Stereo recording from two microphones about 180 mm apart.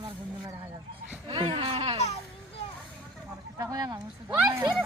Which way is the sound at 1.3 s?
30° right (ahead or behind).